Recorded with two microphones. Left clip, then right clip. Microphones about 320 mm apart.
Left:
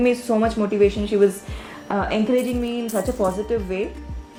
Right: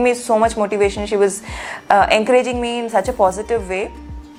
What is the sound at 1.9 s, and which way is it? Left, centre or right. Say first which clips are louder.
Speech: right 12 dB; right.